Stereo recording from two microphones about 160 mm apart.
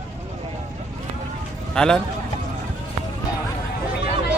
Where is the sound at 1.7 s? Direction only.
5° left (ahead or behind).